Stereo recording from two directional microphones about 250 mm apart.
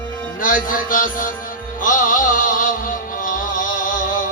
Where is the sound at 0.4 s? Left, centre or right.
Left.